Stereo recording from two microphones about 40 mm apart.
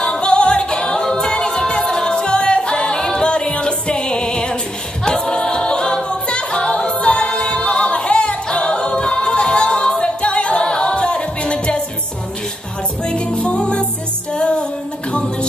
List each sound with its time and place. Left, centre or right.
0.0 s a capella: left
5.5 s choir: left
6.0 s a capella: left
13.0 s music: left